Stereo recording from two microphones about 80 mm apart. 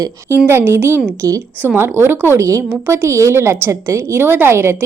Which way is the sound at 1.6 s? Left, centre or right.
Right.